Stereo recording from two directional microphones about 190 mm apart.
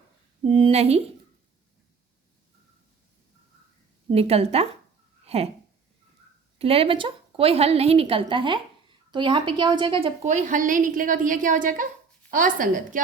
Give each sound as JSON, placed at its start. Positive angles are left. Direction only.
{"t": 0.4, "sound": "speech", "side_deg": -25}
{"t": 4.1, "sound": "speech", "side_deg": -30}
{"t": 5.2, "sound": "a sound", "side_deg": -30}
{"t": 6.6, "sound": "a woman's voice", "side_deg": -30}
{"t": 10.2, "sound": "a woman's voice", "side_deg": -40}